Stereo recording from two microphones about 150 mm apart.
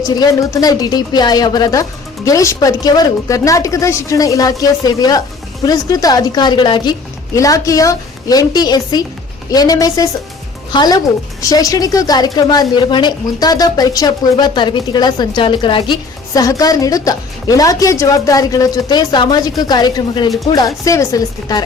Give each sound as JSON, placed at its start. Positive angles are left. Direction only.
{"t": 0.1, "sound": "a woman's voice", "side_deg": 25}